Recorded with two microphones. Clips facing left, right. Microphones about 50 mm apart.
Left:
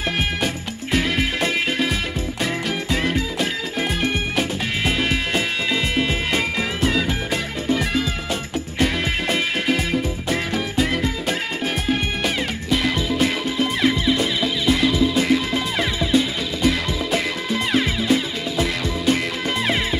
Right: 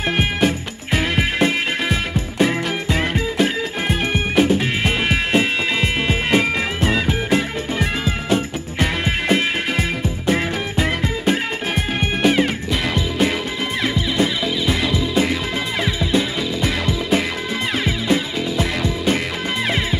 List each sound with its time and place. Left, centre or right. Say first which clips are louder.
0.9 s music: right 2 dB; centre
11.9 s music: right 6 dB; centre